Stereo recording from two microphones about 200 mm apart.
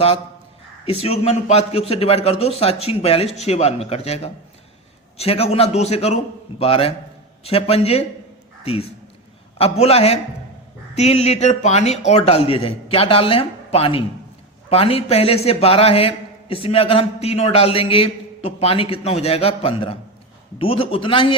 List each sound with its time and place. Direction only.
1.0 s a man's voice: 30° left (ahead or behind)